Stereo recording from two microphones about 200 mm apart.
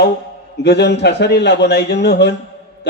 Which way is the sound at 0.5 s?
55° left (ahead or behind).